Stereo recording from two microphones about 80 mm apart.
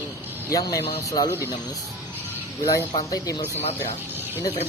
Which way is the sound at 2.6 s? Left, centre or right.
Left.